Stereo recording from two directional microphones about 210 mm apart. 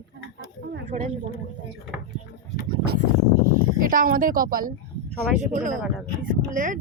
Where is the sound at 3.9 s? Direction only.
40° right (ahead or behind).